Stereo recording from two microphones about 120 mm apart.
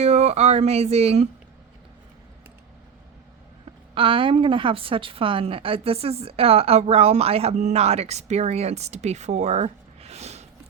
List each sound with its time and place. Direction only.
0.0 s speech: 65° right (ahead or behind)
3.9 s a woman's voice: 45° right (ahead or behind); by 10.4 s 65° right (ahead or behind)